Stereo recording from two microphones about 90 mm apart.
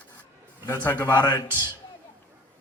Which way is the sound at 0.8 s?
20° left (ahead or behind).